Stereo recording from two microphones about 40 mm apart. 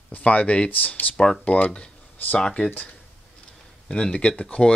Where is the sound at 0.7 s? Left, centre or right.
Left.